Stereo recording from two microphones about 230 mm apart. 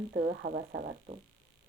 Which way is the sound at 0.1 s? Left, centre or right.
Right.